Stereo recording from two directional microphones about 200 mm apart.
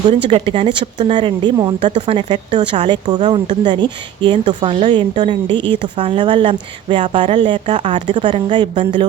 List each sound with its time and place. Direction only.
0.1 s speech: 25° right (ahead or behind)
1.9 s speech: 35° right (ahead or behind)
2.1 s speech: 25° right (ahead or behind)